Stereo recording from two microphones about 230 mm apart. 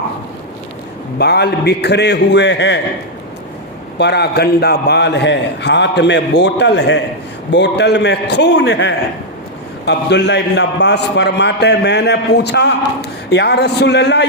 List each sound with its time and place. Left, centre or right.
1.2 s a man's voice: left
3.9 s a man's voice: left